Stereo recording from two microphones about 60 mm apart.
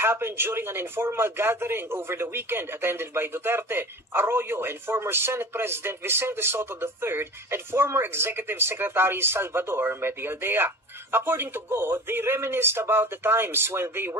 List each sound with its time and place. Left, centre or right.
0.0 s speech: right